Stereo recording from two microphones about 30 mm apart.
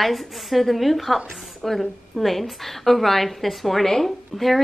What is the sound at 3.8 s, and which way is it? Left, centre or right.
Speech, centre.